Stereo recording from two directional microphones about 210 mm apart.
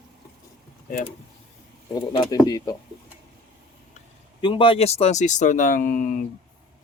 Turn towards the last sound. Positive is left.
turn(degrees=40)  # may be behind; listen again after turning